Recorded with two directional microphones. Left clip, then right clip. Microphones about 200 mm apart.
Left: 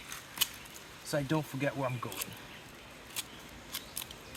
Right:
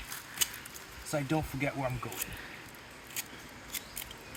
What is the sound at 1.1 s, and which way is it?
Speech, 20° left (ahead or behind).